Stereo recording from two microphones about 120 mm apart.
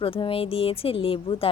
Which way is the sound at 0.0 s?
50° left (ahead or behind).